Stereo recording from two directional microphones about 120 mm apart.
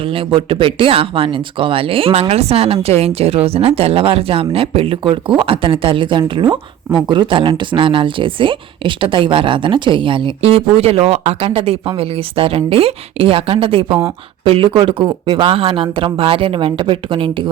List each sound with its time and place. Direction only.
0.1 s speech: 50° right (ahead or behind)
10.4 s speech: 55° right (ahead or behind)